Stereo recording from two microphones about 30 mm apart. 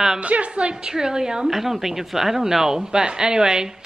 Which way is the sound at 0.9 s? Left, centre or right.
Right.